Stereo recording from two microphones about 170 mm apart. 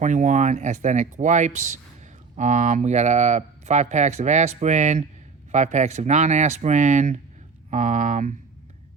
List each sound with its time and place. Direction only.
0.0 s speech: 45° right (ahead or behind)